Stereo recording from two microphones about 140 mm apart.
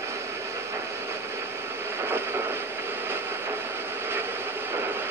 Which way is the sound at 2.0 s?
15° right (ahead or behind).